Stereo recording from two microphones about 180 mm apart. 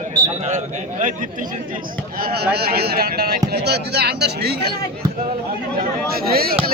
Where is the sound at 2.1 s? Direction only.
55° right (ahead or behind).